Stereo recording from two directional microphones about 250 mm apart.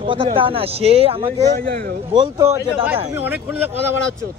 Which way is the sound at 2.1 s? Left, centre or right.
Centre.